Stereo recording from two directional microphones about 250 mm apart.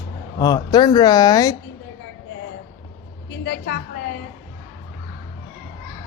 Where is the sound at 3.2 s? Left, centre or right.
Left.